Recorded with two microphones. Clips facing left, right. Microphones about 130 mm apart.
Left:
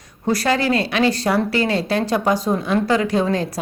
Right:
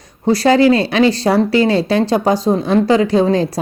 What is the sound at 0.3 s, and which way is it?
Speech, 30° right (ahead or behind).